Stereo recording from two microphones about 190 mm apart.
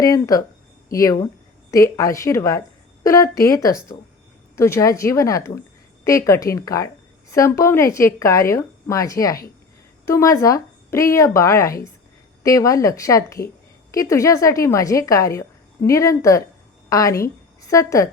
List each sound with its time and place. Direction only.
0.0 s a woman's voice: 15° left (ahead or behind)